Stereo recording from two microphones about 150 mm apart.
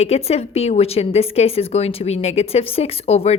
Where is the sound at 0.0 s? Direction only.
45° left (ahead or behind).